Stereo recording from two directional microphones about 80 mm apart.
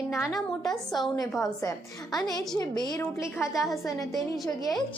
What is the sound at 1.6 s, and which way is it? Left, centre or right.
Speech, left.